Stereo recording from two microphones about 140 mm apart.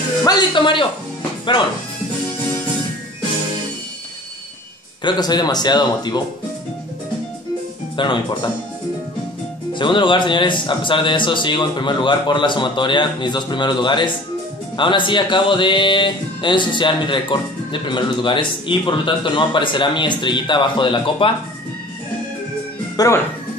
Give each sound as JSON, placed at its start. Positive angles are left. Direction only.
{"t": 0.2, "sound": "a man's voice", "side_deg": 30}
{"t": 5.0, "sound": "speech", "side_deg": 30}
{"t": 7.9, "sound": "a man's voice", "side_deg": 35}
{"t": 9.8, "sound": "a man's voice", "side_deg": 35}
{"t": 22.9, "sound": "speech", "side_deg": 20}